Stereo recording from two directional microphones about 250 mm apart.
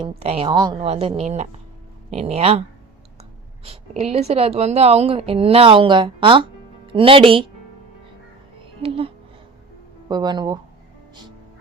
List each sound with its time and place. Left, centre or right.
0.0 s a woman's voice: right
3.6 s a woman's voice: right
8.8 s a woman's voice: right